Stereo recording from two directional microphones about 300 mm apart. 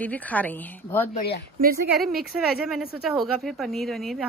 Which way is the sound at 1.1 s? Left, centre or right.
Left.